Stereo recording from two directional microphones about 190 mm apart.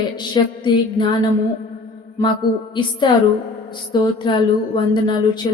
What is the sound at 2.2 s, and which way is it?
Music, 15° left (ahead or behind).